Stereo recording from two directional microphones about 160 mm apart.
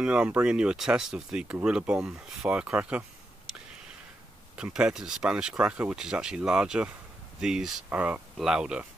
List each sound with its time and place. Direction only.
0.0 s speech: 5° right (ahead or behind)